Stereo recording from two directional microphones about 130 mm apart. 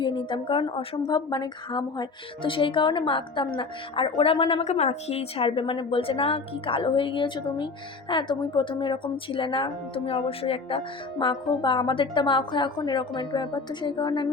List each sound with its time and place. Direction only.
0.0 s a woman's voice: 40° left (ahead or behind)
1.0 s music: 35° left (ahead or behind)